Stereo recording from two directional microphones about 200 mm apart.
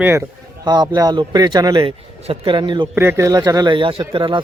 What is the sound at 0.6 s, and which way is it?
Speech, 20° right (ahead or behind).